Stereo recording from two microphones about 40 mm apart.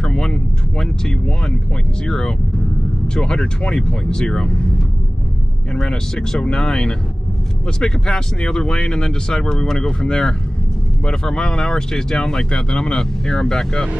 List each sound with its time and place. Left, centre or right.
0.0 s vehicle: centre
2.0 s speech: centre
5.7 s speech: centre